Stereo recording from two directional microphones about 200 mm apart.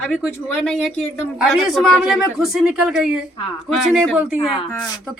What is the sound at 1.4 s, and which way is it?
Speech, centre (ahead or behind).